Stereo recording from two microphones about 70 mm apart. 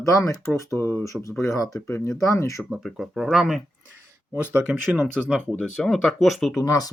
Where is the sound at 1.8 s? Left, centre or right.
Left.